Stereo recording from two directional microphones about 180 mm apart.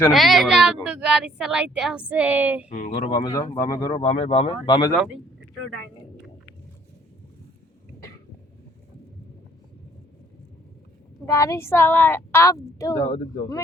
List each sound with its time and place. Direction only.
0.1 s a woman's voice: centre (ahead or behind)
2.6 s speech: 40° left (ahead or behind)
3.1 s speech: 25° left (ahead or behind)
11.3 s a woman's voice: 15° left (ahead or behind)
13.1 s speech: 45° left (ahead or behind)